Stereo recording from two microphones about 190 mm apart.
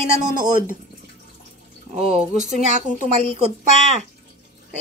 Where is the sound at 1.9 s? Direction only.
35° right (ahead or behind).